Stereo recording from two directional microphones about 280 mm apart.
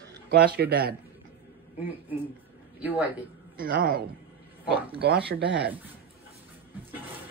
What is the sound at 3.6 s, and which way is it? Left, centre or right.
A man's voice, right.